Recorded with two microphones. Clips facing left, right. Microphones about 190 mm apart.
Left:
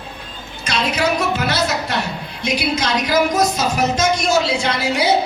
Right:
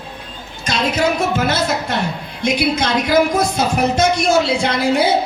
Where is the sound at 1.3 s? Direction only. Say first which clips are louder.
Right 2 dB; 50° right (ahead or behind).